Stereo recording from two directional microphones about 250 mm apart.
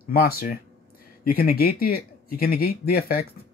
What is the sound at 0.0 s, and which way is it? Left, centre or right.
Speech, left.